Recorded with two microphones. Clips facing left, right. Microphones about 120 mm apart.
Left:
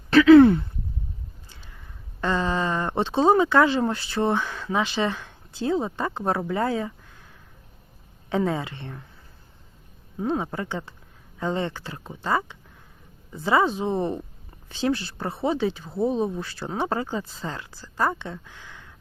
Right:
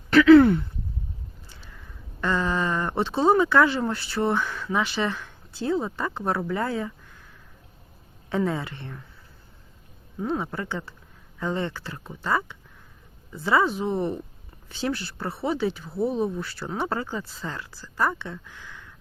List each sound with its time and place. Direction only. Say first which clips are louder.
0.1 s speech: left 1 dB; 20° left (ahead or behind)
2.2 s speech: left 1 dB; 20° left (ahead or behind)
8.3 s speech: left 1 dB; 20° left (ahead or behind)
10.2 s speech: left 2 dB; 20° left (ahead or behind)